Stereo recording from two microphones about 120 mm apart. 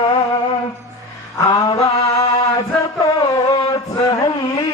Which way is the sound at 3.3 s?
30° left (ahead or behind).